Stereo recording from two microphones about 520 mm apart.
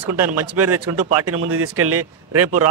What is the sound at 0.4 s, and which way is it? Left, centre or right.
Speech, right.